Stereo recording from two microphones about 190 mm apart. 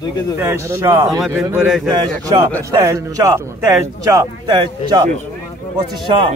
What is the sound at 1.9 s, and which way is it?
A man's voice, 20° right (ahead or behind).